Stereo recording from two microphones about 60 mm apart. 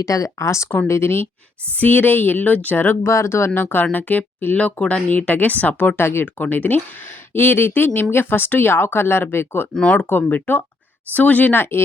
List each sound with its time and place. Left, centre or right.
0.0 s speech: left
1.7 s a woman's voice: left
3.0 s a woman's voice: left
6.0 s speech: left
6.2 s a woman's voice: left
9.7 s speech: centre
10.0 s a woman's voice: left